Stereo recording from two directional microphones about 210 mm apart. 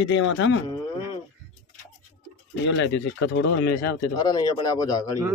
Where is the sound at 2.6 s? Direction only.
65° left (ahead or behind).